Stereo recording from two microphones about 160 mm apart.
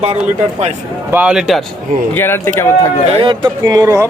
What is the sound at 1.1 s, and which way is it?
Speech, 5° right (ahead or behind).